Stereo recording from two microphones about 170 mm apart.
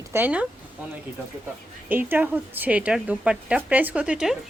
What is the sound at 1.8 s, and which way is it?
Speech, 10° right (ahead or behind).